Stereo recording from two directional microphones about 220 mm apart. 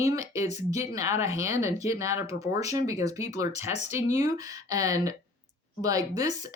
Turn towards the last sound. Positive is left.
turn(degrees=-15)  # may be behind; listen again after turning